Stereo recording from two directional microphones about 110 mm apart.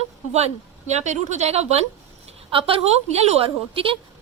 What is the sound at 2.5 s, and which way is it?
A woman's voice, 55° right (ahead or behind).